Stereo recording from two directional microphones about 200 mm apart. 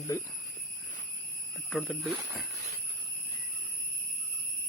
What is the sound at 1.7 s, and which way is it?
Speech, centre (ahead or behind).